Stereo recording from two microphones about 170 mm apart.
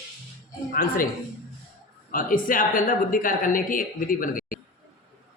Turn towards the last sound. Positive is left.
turn(degrees=55)  # may be behind; listen again after turning